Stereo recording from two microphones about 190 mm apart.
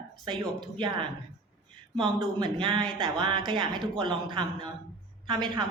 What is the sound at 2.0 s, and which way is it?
A woman's voice, 25° right (ahead or behind).